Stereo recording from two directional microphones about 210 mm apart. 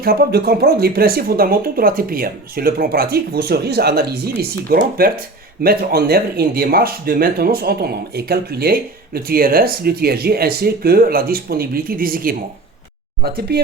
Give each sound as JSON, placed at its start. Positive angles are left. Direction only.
{"t": 0.0, "sound": "speech", "side_deg": -45}